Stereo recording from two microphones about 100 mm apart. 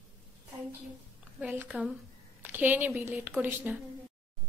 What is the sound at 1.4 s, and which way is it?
A woman's voice, 15° right (ahead or behind).